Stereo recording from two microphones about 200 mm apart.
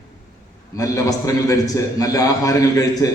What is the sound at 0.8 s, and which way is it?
A man's voice, 15° left (ahead or behind).